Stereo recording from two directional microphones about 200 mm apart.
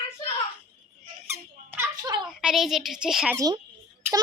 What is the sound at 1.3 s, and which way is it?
Squeak, 15° right (ahead or behind).